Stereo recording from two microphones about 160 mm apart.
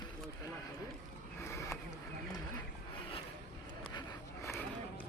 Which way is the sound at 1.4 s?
15° left (ahead or behind).